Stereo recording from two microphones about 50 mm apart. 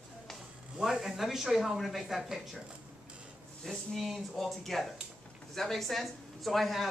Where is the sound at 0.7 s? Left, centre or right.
Centre.